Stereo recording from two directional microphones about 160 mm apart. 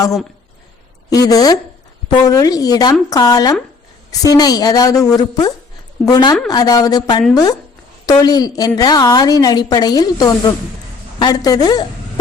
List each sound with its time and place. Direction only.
1.1 s a woman's voice: 25° left (ahead or behind)